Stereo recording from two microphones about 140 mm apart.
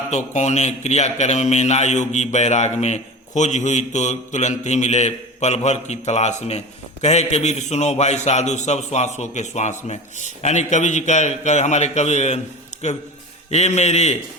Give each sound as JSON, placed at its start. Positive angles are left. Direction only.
{"t": 0.1, "sound": "a man's voice", "side_deg": 55}
{"t": 12.7, "sound": "a sound", "side_deg": 60}
{"t": 13.5, "sound": "a man's voice", "side_deg": 50}